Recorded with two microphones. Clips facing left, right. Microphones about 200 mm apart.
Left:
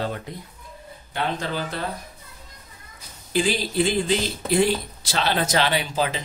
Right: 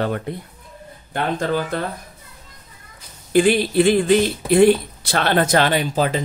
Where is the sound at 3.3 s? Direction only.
60° right (ahead or behind).